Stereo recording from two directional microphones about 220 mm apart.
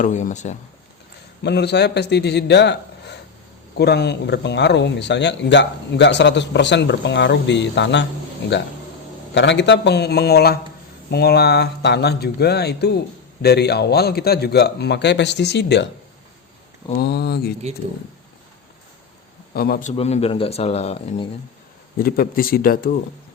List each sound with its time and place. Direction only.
0.0 s speech: 35° left (ahead or behind)
1.5 s a man's voice: 50° left (ahead or behind)
9.3 s a man's voice: 55° left (ahead or behind)
17.0 s a man's voice: 45° left (ahead or behind)
19.5 s a man's voice: 45° left (ahead or behind)
19.9 s speech: 30° left (ahead or behind)
21.9 s speech: 40° left (ahead or behind)